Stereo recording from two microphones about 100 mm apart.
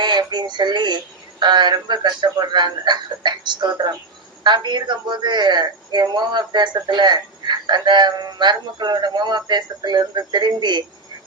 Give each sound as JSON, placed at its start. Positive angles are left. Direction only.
{"t": 0.0, "sound": "a woman's voice", "side_deg": -50}